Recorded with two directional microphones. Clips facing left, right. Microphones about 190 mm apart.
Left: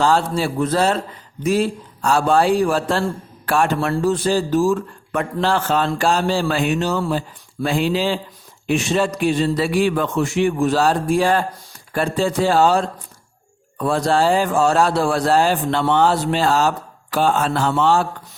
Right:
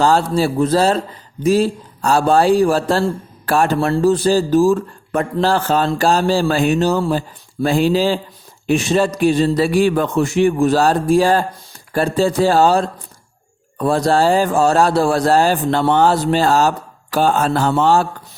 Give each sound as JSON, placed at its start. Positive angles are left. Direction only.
{"t": 0.0, "sound": "a man's voice", "side_deg": -40}